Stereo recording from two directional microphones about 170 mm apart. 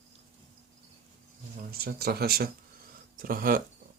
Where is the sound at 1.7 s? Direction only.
65° right (ahead or behind).